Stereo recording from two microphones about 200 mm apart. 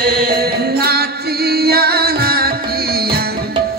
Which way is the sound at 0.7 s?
50° right (ahead or behind).